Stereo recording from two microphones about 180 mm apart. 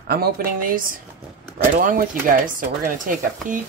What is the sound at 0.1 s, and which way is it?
Speech, 55° right (ahead or behind).